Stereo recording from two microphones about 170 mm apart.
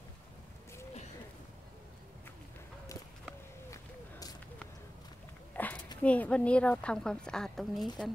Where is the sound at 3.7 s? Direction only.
20° left (ahead or behind).